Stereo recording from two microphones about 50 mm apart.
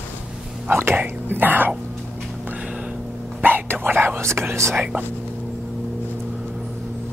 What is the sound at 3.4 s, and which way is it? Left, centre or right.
Whispering, right.